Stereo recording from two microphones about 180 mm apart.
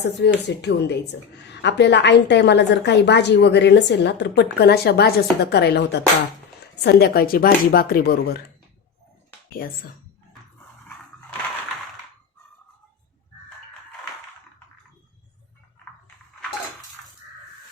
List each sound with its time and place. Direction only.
0.0 s a woman's voice: 70° left (ahead or behind)